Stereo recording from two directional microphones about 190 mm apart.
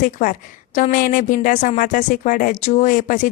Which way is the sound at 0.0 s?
45° left (ahead or behind).